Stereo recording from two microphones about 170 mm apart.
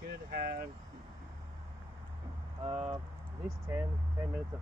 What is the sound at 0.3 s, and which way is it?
Speech, 60° right (ahead or behind).